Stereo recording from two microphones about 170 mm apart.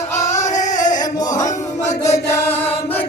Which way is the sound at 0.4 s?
45° left (ahead or behind).